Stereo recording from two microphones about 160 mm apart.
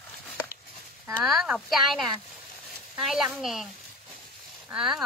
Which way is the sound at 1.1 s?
Centre (ahead or behind).